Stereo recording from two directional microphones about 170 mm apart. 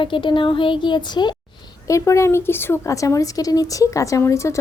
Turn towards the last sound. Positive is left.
turn(degrees=15)  # may be behind; listen again after turning